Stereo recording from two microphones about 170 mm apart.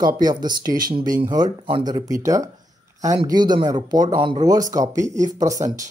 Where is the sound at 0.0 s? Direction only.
25° right (ahead or behind).